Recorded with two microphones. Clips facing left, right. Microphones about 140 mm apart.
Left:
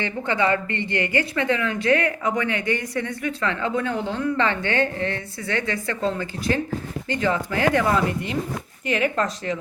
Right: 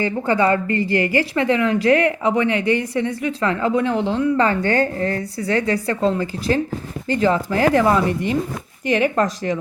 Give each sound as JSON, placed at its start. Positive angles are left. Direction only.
{"t": 0.0, "sound": "speech", "side_deg": -40}